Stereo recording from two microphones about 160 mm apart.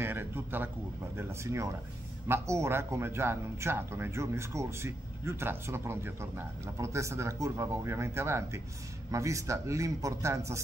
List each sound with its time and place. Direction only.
0.0 s a man's voice: 15° right (ahead or behind)